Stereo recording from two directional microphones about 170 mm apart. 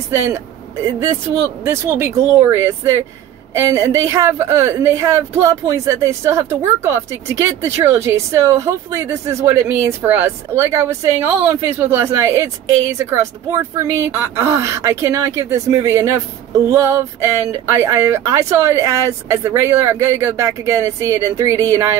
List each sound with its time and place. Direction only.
0.1 s speech: 15° right (ahead or behind)